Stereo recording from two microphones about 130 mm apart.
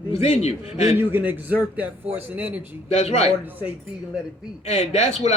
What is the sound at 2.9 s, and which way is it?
Speech, 55° left (ahead or behind).